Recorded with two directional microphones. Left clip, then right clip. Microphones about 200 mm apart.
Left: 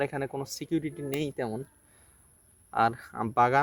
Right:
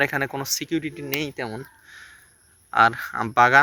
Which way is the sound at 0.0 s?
5° right (ahead or behind).